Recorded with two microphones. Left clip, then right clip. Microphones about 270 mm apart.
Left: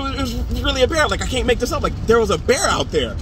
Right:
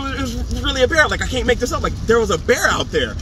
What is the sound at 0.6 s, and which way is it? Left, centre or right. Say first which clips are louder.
Speech: right 2 dB; left.